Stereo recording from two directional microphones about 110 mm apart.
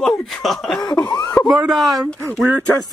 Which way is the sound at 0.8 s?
35° left (ahead or behind).